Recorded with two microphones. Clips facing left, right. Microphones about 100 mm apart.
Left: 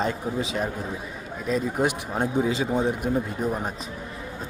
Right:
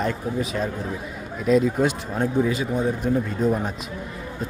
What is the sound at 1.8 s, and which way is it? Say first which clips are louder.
Speech: right 2 dB; 10° left (ahead or behind).